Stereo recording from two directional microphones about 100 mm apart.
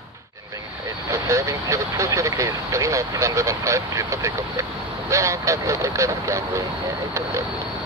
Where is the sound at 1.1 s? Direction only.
30° right (ahead or behind).